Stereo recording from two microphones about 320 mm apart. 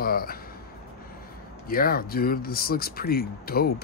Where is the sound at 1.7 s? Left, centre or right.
Left.